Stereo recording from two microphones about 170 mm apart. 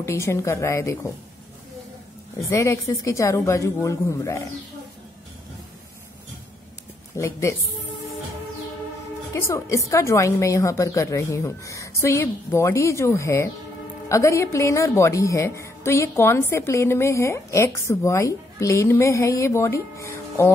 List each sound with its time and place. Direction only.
0.0 s a woman's voice: 15° left (ahead or behind)
2.5 s a woman's voice: 15° left (ahead or behind)
7.2 s a woman's voice: 15° left (ahead or behind)
9.3 s a woman's voice: 15° left (ahead or behind)